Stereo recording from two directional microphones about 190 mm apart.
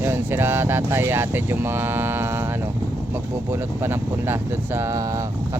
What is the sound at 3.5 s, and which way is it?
Speech, 10° right (ahead or behind).